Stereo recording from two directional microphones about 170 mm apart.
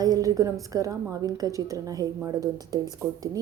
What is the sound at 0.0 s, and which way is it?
A woman's voice, 20° right (ahead or behind).